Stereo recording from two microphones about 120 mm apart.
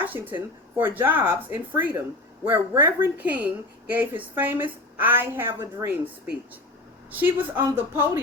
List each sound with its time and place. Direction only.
0.0 s speech: 15° right (ahead or behind)
7.1 s a woman's voice: 15° right (ahead or behind)